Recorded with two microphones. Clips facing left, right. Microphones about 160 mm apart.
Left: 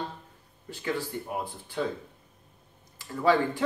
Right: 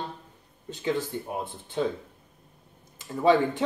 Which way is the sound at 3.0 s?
20° right (ahead or behind).